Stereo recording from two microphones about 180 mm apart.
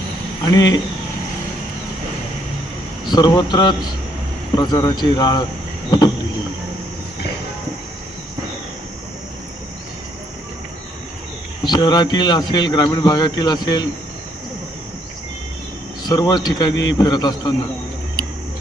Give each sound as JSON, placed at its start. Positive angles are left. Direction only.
{"t": 0.4, "sound": "speech", "side_deg": 20}
{"t": 3.1, "sound": "speech", "side_deg": 25}
{"t": 11.6, "sound": "speech", "side_deg": 25}
{"t": 16.0, "sound": "speech", "side_deg": 25}